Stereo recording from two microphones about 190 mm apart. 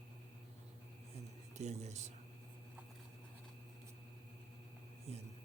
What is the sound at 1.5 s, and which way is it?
Speech, 35° right (ahead or behind).